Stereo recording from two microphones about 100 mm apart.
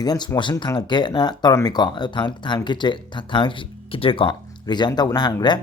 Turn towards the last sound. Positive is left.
turn(degrees=45)  # may be behind; listen again after turning